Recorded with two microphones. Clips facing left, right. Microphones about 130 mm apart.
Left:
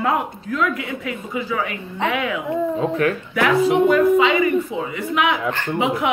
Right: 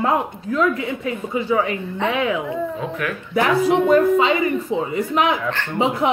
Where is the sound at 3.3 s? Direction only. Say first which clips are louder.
Right 1 dB; 30° right (ahead or behind).